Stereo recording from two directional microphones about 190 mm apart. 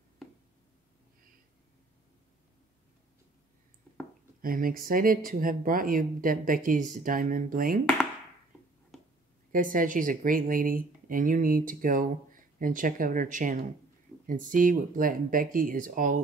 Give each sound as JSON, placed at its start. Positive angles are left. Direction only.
{"t": 4.4, "sound": "speech", "side_deg": -50}
{"t": 9.5, "sound": "speech", "side_deg": -45}